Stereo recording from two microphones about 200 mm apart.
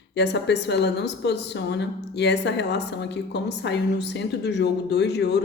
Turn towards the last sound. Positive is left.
turn(degrees=55)  # may be behind; listen again after turning